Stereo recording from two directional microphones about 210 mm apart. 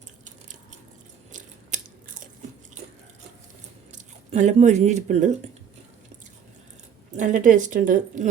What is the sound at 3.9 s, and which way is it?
Speech, 35° right (ahead or behind).